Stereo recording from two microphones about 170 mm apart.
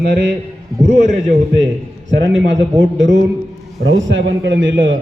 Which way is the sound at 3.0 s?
90° right.